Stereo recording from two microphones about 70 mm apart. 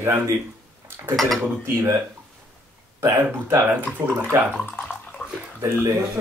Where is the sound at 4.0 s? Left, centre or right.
Right.